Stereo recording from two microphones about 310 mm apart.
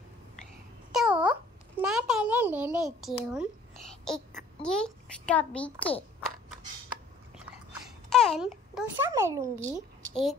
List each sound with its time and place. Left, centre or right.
0.9 s babbling: centre
1.8 s a child's voice: centre
8.1 s a child's voice: centre